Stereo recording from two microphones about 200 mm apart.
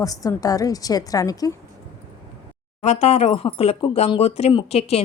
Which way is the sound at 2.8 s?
30° left (ahead or behind).